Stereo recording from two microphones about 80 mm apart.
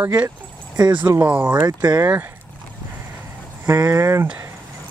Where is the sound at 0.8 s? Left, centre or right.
Right.